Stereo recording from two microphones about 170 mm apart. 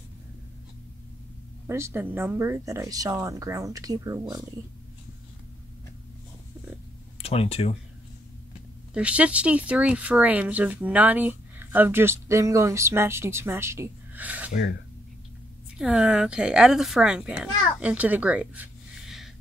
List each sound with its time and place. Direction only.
1.7 s speech: 15° right (ahead or behind)
7.2 s speech: 35° left (ahead or behind)
8.9 s speech: 5° right (ahead or behind)
14.5 s speech: 85° left
15.8 s a woman's voice: 5° right (ahead or behind)